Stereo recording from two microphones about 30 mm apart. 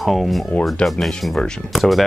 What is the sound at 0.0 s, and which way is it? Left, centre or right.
Speech, centre.